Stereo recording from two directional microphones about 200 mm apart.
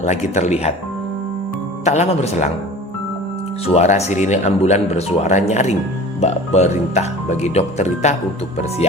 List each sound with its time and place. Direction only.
0.0 s speech: 35° left (ahead or behind)
1.8 s speech: 35° left (ahead or behind)
3.8 s speech: 35° left (ahead or behind)